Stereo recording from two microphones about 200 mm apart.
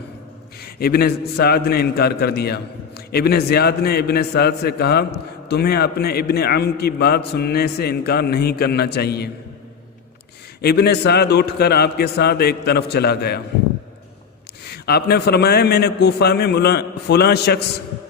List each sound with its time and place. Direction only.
0.6 s a man's voice: 50° left (ahead or behind)
10.6 s a man's voice: 55° left (ahead or behind)
14.8 s a man's voice: 50° left (ahead or behind)